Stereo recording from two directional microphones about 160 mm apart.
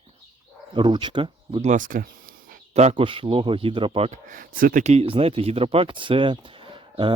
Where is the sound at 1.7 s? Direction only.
55° right (ahead or behind).